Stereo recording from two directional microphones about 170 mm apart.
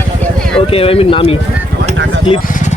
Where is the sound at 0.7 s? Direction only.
35° left (ahead or behind).